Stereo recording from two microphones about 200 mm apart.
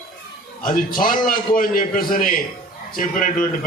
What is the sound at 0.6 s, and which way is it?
A man's voice, 45° left (ahead or behind).